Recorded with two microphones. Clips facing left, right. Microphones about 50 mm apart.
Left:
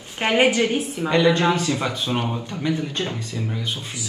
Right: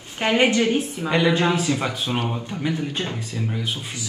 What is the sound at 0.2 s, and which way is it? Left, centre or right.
Speech, left.